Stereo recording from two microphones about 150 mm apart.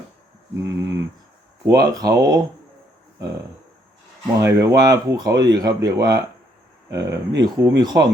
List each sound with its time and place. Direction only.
0.6 s speech: 20° right (ahead or behind)
4.4 s speech: 20° right (ahead or behind)